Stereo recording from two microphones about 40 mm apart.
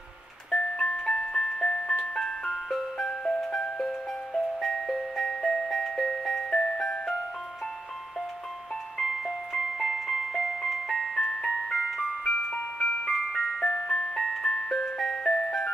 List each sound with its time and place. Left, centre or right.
0.5 s ice cream truck: left
3.6 s music: left
4.6 s music: centre; by 7.0 s left
8.9 s music: centre
13.1 s music: centre
15.2 s music: left